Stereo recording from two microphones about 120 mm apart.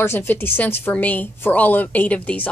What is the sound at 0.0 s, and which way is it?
A woman's voice, 20° left (ahead or behind).